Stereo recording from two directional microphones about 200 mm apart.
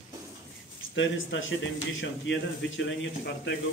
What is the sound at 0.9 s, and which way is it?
A man's voice, 70° left (ahead or behind).